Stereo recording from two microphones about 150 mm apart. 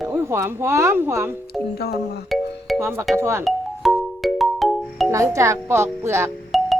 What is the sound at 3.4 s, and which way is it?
Music, centre (ahead or behind).